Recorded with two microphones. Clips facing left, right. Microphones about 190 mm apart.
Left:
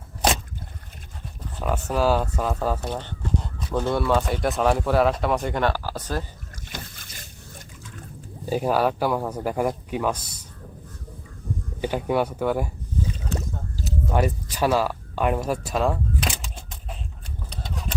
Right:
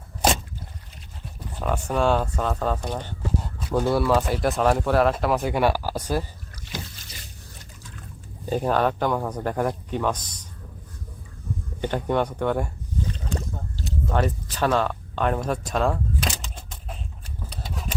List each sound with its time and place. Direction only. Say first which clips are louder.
1.6 s speech: even; 5° left (ahead or behind)
2.9 s speech: even; 10° right (ahead or behind)
6.7 s rowboat: right 3 dB; 55° left (ahead or behind)
8.4 s speech: even; 10° left (ahead or behind)
11.8 s speech: even; 10° left (ahead or behind)
17.5 s typewriter: left 1 dB; 5° right (ahead or behind)